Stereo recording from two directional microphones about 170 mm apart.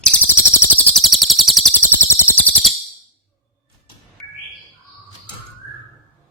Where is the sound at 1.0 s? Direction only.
Centre (ahead or behind).